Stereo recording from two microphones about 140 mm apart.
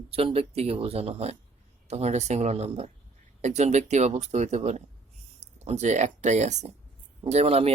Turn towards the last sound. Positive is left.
turn(degrees=-50)  # may be behind; listen again after turning